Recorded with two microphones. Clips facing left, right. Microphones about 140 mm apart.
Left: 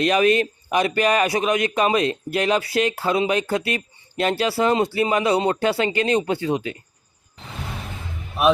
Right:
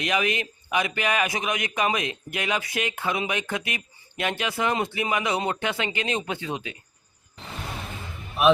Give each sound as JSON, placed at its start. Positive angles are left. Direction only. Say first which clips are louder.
{"t": 0.0, "sound": "a man's voice", "louder": "left 8 dB", "side_deg": 35}